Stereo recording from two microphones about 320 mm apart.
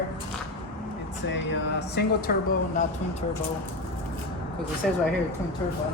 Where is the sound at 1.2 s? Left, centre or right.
Left.